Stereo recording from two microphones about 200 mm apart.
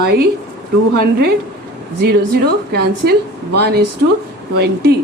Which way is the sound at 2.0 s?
55° right (ahead or behind).